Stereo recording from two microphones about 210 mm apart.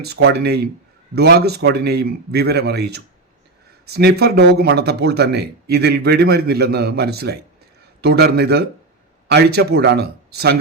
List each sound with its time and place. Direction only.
0.0 s speech: 50° right (ahead or behind)